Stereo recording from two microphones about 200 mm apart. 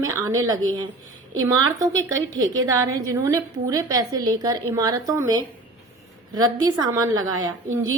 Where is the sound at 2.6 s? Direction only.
15° right (ahead or behind).